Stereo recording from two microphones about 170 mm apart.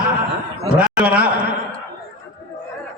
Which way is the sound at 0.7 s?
10° right (ahead or behind).